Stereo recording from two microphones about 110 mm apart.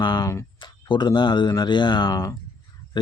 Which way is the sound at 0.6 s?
45° left (ahead or behind).